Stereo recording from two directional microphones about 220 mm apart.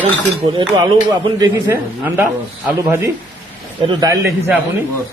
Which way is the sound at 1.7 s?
10° right (ahead or behind).